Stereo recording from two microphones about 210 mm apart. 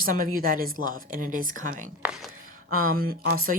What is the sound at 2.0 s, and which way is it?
Speech, 5° right (ahead or behind).